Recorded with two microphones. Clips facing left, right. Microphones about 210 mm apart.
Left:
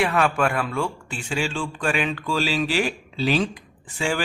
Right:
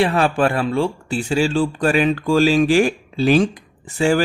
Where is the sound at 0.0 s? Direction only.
30° right (ahead or behind).